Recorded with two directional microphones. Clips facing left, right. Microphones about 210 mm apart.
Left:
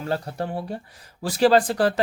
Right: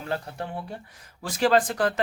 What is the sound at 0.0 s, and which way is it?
Speech, 40° left (ahead or behind).